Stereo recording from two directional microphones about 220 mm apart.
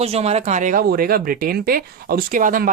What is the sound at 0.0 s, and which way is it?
Speech, 30° right (ahead or behind).